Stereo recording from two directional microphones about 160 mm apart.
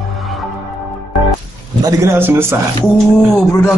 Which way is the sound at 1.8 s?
15° right (ahead or behind).